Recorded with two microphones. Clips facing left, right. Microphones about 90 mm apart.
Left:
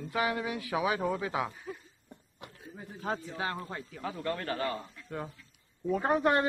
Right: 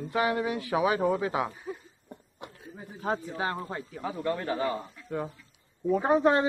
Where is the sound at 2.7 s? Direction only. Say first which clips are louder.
Right 4 dB; 15° right (ahead or behind).